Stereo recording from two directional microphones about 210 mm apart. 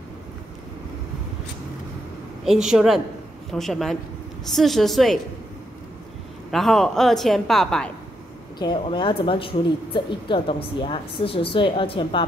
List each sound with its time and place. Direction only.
2.4 s a woman's voice: centre (ahead or behind)
6.5 s a woman's voice: centre (ahead or behind)
8.5 s a woman's voice: 20° left (ahead or behind)